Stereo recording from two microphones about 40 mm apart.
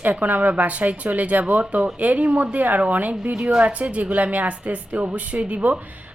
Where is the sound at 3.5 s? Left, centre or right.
Right.